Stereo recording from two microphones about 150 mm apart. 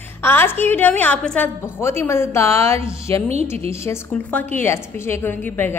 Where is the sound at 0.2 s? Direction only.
15° left (ahead or behind).